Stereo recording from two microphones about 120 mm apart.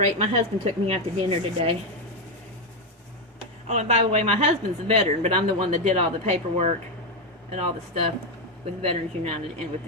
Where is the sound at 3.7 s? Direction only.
75° right (ahead or behind).